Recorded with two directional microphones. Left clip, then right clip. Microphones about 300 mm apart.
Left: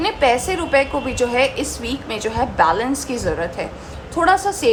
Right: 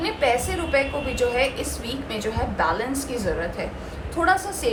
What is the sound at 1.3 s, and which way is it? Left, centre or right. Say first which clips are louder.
A woman's voice: left 5 dB; left.